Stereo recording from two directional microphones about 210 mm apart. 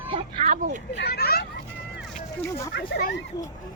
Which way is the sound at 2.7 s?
50° left (ahead or behind).